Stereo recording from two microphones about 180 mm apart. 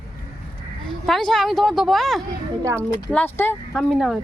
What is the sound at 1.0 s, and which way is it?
Speech, centre (ahead or behind).